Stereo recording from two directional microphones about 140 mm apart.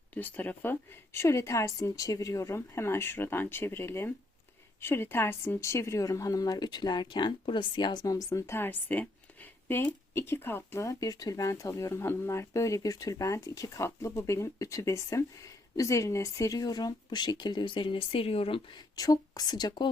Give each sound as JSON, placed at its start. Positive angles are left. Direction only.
{"t": 0.1, "sound": "speech", "side_deg": 10}
{"t": 18.9, "sound": "speech", "side_deg": 25}